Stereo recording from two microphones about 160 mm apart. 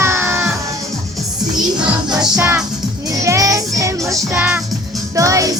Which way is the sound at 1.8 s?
5° right (ahead or behind).